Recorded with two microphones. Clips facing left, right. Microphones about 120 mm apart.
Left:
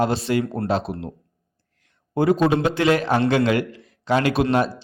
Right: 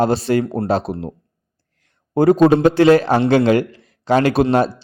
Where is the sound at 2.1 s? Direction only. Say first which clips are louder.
Right 6 dB; 40° right (ahead or behind).